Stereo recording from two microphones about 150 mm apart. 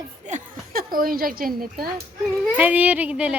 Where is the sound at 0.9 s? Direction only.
70° right (ahead or behind).